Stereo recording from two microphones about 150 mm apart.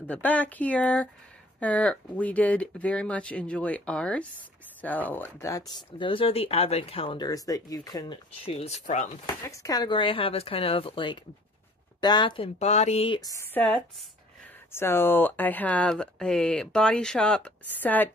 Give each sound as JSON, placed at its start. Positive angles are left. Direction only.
{"t": 0.0, "sound": "speech", "side_deg": 10}
{"t": 7.2, "sound": "speech", "side_deg": 25}
{"t": 8.5, "sound": "speech", "side_deg": 45}
{"t": 9.4, "sound": "speech", "side_deg": 20}
{"t": 12.5, "sound": "speech", "side_deg": 45}
{"t": 13.2, "sound": "speech", "side_deg": 20}
{"t": 14.7, "sound": "speech", "side_deg": 15}